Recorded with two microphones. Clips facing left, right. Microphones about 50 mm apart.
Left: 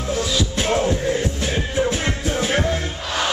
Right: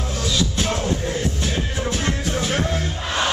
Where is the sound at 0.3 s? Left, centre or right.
Centre.